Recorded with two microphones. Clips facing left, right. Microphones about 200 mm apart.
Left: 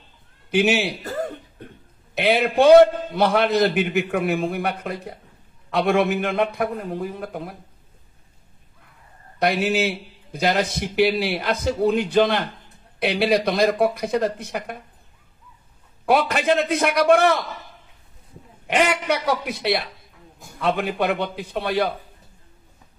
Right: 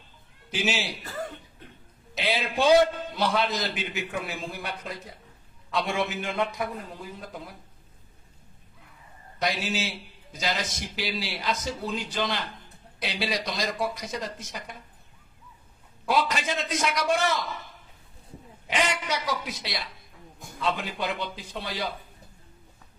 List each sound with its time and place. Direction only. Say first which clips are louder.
0.5 s a man's voice: left 10 dB; 60° left (ahead or behind)
2.1 s a man's voice: left 9 dB; 60° left (ahead or behind)
9.4 s a man's voice: left 9 dB; 60° left (ahead or behind)
16.1 s a man's voice: left 7 dB; 60° left (ahead or behind)
18.7 s a man's voice: left 7 dB; 60° left (ahead or behind)